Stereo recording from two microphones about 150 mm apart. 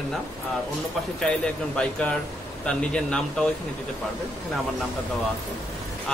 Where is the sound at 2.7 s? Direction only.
5° left (ahead or behind).